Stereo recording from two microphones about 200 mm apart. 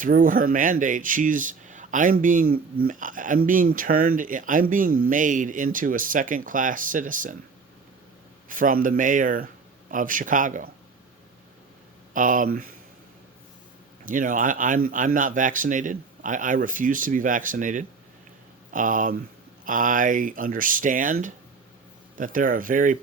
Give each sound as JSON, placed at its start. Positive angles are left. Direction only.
{"t": 0.0, "sound": "speech", "side_deg": -45}
{"t": 8.4, "sound": "speech", "side_deg": -40}
{"t": 12.1, "sound": "speech", "side_deg": -40}
{"t": 14.0, "sound": "speech", "side_deg": -40}